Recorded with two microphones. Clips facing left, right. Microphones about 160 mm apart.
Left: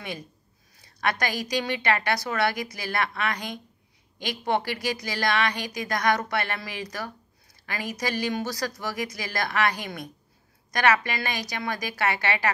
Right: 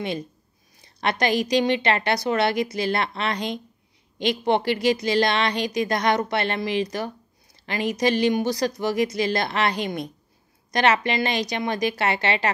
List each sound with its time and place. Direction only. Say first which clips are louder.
1.0 s a woman's voice: right 5 dB; 25° right (ahead or behind)